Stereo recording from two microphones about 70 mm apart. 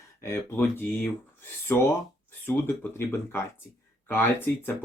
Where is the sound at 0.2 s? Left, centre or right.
Left.